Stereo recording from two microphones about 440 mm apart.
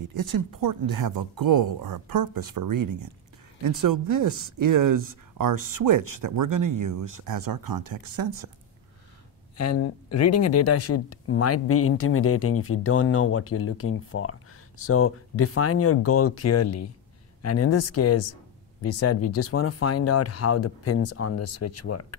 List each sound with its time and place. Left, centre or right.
0.4 s speech: right
9.6 s speech: left